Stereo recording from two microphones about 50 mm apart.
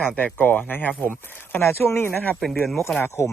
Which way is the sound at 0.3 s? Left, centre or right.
Left.